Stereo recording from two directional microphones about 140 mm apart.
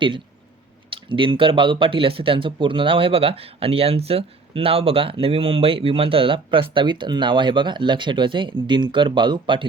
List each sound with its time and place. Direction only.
0.9 s speech: 35° right (ahead or behind)